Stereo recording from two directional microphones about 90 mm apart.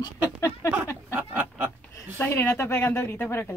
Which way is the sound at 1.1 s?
20° right (ahead or behind).